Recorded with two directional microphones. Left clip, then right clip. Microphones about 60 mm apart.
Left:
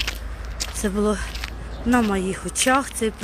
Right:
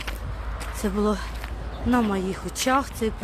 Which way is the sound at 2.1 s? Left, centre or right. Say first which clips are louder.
Left 3 dB; left.